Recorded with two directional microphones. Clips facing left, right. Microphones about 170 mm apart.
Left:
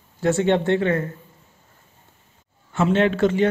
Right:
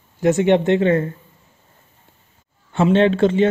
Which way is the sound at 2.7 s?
30° right (ahead or behind).